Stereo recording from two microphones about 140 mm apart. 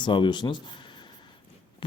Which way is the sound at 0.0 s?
35° left (ahead or behind).